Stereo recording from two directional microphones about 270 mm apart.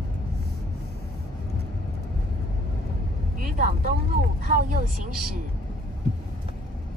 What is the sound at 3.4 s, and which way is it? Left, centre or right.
Speech, right.